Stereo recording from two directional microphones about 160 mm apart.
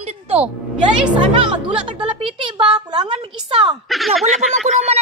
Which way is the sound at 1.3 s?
30° right (ahead or behind).